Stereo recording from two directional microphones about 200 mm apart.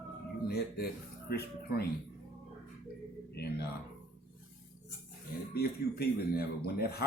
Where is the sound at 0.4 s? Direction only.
50° left (ahead or behind).